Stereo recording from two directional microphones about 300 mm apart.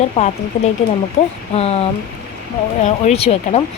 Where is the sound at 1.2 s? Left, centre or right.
Centre.